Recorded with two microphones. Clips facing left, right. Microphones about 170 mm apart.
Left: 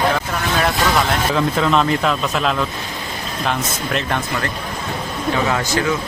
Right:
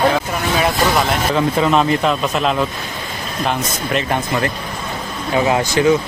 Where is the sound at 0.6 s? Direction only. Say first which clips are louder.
Right 1 dB; 5° right (ahead or behind).